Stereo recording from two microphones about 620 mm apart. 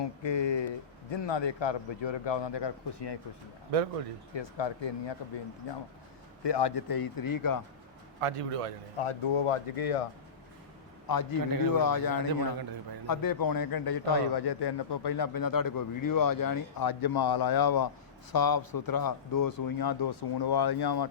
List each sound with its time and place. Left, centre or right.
0.0 s a man's voice: left
4.4 s a man's voice: left
6.4 s a man's voice: left
8.2 s a man's voice: right
9.0 s speech: left
11.1 s a man's voice: left